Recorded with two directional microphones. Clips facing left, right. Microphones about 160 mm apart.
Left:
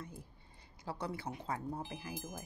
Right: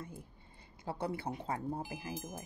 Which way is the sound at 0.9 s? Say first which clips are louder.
Right 4 dB; 55° right (ahead or behind).